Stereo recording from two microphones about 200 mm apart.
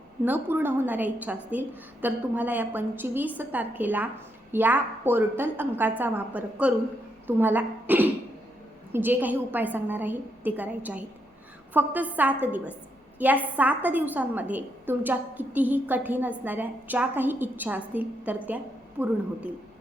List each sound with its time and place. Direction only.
0.3 s a woman's voice: 10° right (ahead or behind)